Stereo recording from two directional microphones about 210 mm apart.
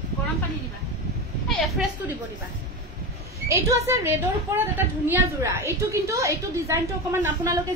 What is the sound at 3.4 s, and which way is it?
A woman's voice, 15° right (ahead or behind).